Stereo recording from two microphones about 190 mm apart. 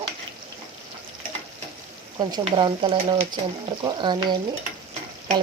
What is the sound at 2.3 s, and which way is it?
Speech, 25° right (ahead or behind).